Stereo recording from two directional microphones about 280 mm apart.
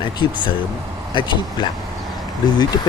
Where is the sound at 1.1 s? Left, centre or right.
Centre.